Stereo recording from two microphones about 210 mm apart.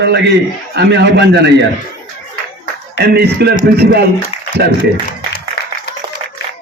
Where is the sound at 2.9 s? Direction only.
50° right (ahead or behind).